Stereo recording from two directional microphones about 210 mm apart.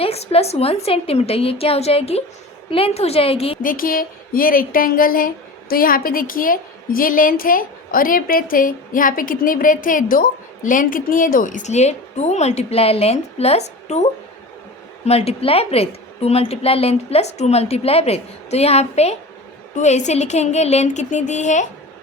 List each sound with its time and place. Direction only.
0.0 s a woman's voice: 30° left (ahead or behind)
3.6 s speech: 40° left (ahead or behind)
15.0 s a woman's voice: 30° left (ahead or behind)